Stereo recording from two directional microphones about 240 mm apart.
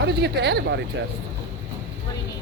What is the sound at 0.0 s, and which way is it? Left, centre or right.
Speech, right.